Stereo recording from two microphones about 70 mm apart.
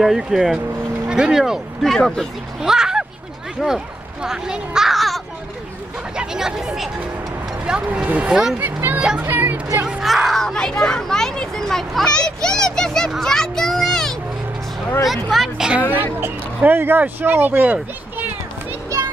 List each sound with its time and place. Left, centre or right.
0.0 s speech: centre
2.6 s a sound: centre
6.1 s a child's voice: centre; by 9.6 s right
9.8 s speech: centre
13.2 s a sound: centre
15.0 s speech: centre
15.8 s speech: right
18.9 s child singing: right